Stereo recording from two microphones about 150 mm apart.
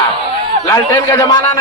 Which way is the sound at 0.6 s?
20° left (ahead or behind).